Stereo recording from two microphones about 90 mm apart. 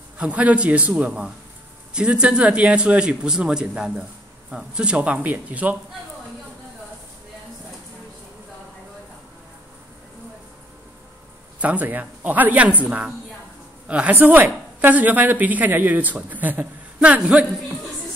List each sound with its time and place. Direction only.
0.2 s speech: 15° right (ahead or behind)
11.6 s speech: 20° right (ahead or behind)
13.8 s a woman's voice: 15° right (ahead or behind)